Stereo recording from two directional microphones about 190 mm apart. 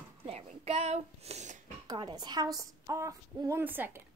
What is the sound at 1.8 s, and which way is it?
A woman's voice, 20° right (ahead or behind).